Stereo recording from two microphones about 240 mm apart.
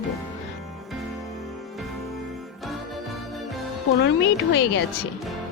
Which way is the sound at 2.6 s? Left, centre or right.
Centre.